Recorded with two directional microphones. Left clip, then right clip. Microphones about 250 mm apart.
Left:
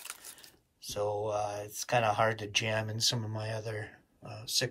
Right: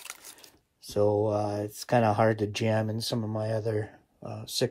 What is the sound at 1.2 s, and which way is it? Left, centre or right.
Speech, right.